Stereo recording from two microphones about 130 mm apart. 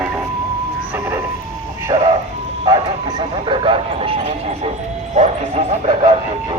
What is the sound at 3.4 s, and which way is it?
Speech, 45° right (ahead or behind).